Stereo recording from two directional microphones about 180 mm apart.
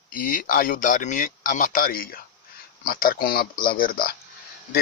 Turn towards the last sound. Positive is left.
turn(degrees=55)  # may be behind; listen again after turning